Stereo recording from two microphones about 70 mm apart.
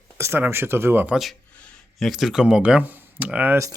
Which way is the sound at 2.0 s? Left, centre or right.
Centre.